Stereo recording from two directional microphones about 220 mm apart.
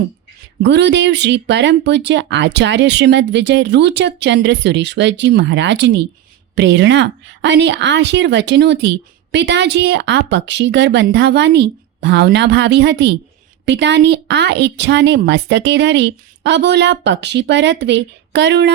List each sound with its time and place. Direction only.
0.6 s speech: 50° right (ahead or behind)